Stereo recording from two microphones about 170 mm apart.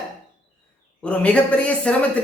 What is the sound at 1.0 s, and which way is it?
Speech, 5° left (ahead or behind).